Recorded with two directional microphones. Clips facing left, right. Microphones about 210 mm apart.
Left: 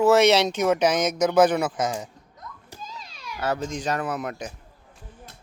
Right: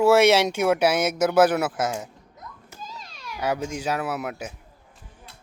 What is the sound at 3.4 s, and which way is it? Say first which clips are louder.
Speech: even; 10° right (ahead or behind).